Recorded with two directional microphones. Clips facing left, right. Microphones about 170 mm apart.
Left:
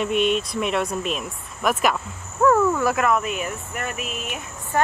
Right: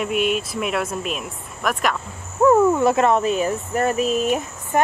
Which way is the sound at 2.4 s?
20° right (ahead or behind).